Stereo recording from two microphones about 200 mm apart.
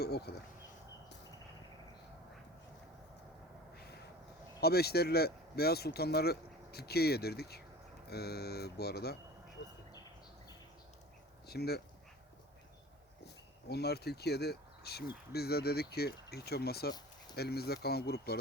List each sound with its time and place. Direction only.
0.0 s speech: 55° left (ahead or behind)
3.8 s a sound: 55° left (ahead or behind)
4.6 s speech: 50° left (ahead or behind)
11.4 s speech: 55° left (ahead or behind)
13.2 s speech: 55° left (ahead or behind)